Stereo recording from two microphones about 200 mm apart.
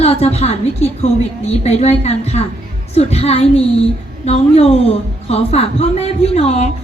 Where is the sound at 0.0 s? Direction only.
30° left (ahead or behind).